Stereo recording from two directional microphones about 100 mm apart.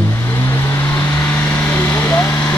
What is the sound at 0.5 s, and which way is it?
Vehicle, 25° left (ahead or behind).